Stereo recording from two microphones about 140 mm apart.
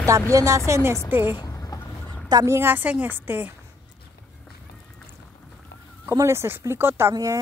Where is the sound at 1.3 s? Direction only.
25° left (ahead or behind).